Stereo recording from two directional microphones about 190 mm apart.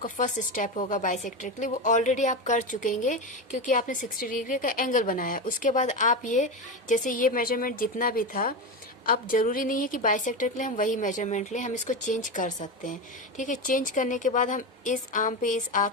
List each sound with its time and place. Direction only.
0.0 s a woman's voice: 45° left (ahead or behind)